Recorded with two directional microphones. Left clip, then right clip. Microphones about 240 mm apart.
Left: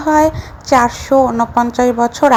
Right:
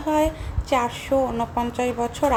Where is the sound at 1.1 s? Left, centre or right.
Left.